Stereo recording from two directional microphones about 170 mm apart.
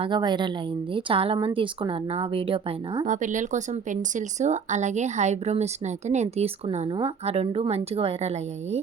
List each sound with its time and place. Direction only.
0.0 s speech: 25° right (ahead or behind)
3.1 s speech: 45° right (ahead or behind)